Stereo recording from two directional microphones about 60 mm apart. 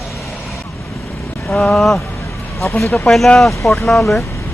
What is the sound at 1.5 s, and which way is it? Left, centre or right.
Speech, centre.